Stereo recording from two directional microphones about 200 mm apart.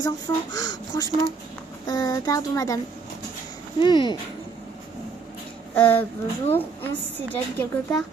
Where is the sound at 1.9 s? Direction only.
20° left (ahead or behind).